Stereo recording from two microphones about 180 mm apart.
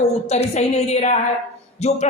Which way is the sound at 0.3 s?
40° left (ahead or behind).